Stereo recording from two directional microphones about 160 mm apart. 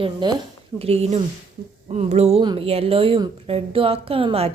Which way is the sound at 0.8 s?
40° right (ahead or behind).